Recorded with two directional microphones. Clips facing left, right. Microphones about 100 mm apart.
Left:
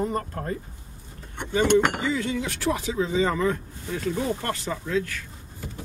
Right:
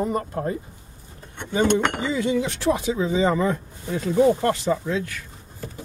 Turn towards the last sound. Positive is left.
turn(degrees=-20)  # may be behind; listen again after turning